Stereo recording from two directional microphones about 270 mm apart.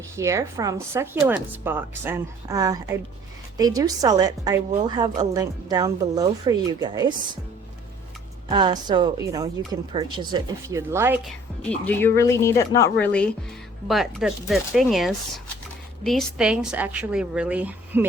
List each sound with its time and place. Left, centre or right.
0.2 s a woman's voice: centre
8.4 s a woman's voice: centre
11.7 s speech: centre